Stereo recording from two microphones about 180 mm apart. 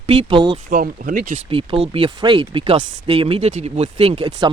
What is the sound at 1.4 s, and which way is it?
Speech, 30° right (ahead or behind).